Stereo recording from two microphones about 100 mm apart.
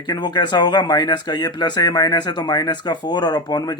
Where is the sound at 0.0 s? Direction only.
45° left (ahead or behind).